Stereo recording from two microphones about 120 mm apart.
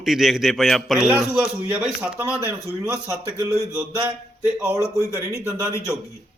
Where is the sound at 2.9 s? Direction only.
25° right (ahead or behind).